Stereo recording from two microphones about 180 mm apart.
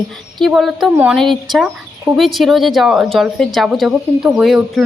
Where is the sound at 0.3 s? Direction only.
Centre (ahead or behind).